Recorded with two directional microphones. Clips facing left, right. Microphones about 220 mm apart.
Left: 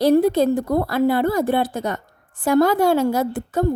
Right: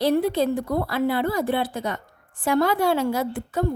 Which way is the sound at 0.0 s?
45° left (ahead or behind).